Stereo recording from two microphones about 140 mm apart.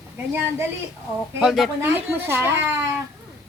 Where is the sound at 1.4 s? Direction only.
Centre (ahead or behind).